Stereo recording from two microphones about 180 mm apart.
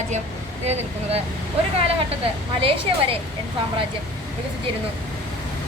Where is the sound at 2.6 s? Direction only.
30° right (ahead or behind).